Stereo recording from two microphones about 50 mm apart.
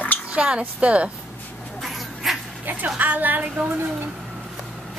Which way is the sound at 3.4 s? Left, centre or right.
Right.